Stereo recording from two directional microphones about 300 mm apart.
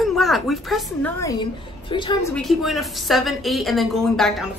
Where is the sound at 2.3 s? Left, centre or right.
Centre.